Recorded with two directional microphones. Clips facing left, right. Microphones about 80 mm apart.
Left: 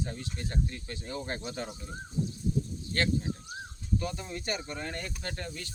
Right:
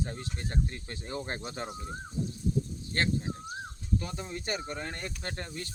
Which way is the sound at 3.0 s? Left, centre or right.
Right.